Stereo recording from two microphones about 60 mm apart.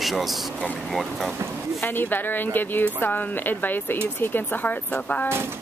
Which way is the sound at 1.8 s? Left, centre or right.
Left.